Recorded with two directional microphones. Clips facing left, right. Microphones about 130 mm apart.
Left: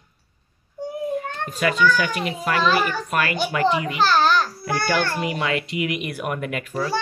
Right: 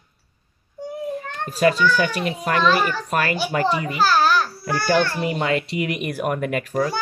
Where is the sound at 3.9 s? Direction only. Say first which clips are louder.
Right 3 dB; 5° right (ahead or behind).